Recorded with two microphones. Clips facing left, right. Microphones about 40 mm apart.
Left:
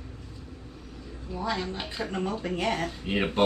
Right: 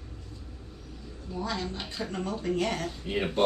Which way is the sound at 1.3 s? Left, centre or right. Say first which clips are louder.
Left 2 dB; centre.